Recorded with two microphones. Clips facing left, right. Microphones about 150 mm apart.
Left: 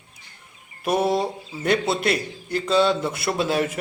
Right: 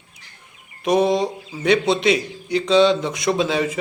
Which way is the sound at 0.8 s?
5° left (ahead or behind).